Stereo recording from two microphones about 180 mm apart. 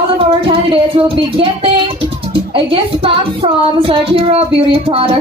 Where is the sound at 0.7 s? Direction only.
30° right (ahead or behind).